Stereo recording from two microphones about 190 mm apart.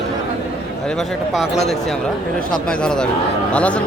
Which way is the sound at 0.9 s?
Centre (ahead or behind).